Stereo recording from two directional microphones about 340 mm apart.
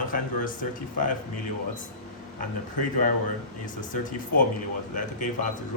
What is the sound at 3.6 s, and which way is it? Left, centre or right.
Speech, left.